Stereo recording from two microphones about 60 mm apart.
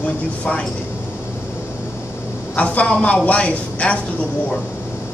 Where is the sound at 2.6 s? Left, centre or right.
Left.